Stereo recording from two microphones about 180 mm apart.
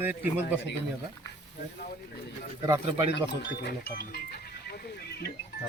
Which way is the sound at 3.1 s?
70° left (ahead or behind).